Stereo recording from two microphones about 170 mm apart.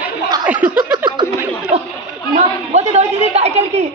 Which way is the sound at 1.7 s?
40° right (ahead or behind).